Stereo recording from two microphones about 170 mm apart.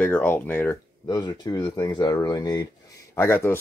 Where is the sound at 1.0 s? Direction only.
25° left (ahead or behind).